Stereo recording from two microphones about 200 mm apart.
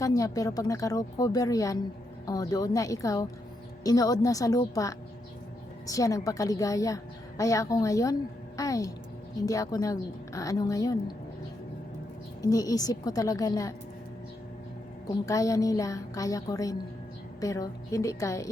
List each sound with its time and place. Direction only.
0.0 s a woman's voice: 15° left (ahead or behind)
12.4 s a woman's voice: 20° left (ahead or behind)
15.0 s a woman's voice: 15° left (ahead or behind)